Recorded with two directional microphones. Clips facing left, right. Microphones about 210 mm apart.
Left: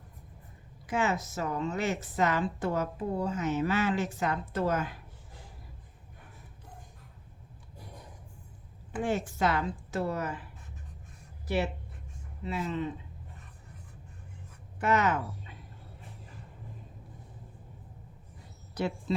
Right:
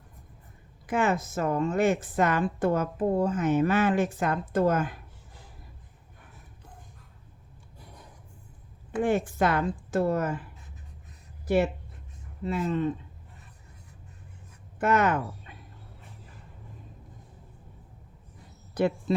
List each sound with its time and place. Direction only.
0.9 s a woman's voice: 55° right (ahead or behind)
9.0 s a woman's voice: 55° right (ahead or behind)
11.4 s a woman's voice: 50° right (ahead or behind)
14.8 s speech: 50° right (ahead or behind)
18.7 s speech: 55° right (ahead or behind)